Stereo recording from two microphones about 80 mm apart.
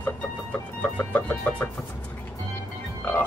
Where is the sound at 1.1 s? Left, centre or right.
Left.